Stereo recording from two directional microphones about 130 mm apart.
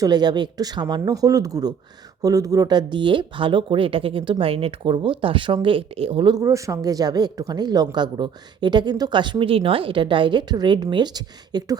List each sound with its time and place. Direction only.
0.0 s speech: 35° right (ahead or behind)
6.3 s speech: 25° right (ahead or behind)